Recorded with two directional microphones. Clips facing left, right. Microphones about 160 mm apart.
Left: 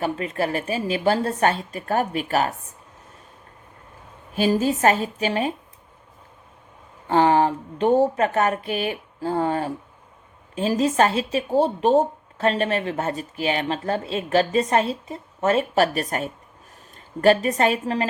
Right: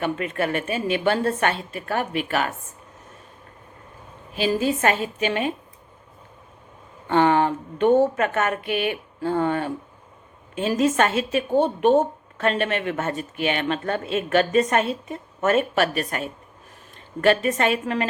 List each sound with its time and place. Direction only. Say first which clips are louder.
0.0 s speech: even; 35° left (ahead or behind)
4.4 s speech: left 2 dB; 40° left (ahead or behind)
7.1 s speech: left 1 dB; 35° left (ahead or behind)